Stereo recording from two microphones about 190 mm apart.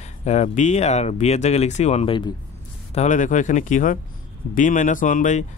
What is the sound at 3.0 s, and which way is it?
Speech, 40° left (ahead or behind).